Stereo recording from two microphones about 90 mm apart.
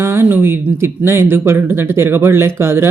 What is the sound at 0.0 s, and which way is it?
Speech, 25° right (ahead or behind).